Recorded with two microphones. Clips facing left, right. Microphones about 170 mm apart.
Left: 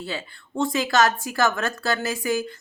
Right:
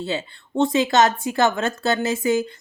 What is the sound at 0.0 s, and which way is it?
Speech, 20° right (ahead or behind).